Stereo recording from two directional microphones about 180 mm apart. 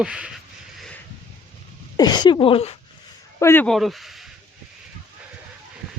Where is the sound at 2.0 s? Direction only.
25° left (ahead or behind).